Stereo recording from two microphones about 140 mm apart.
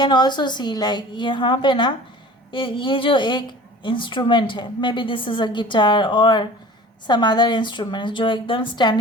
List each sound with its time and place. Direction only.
0.0 s a woman's voice: 30° left (ahead or behind)